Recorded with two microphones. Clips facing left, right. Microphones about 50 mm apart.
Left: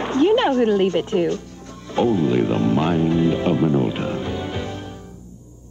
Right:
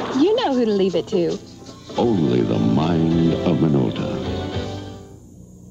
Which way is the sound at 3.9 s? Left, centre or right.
Left.